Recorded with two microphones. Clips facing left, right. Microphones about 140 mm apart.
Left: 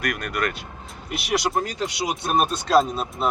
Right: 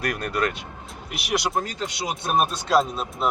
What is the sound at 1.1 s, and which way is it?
Speech, centre (ahead or behind).